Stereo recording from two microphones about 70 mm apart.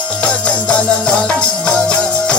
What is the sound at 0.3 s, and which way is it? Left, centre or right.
Music, centre.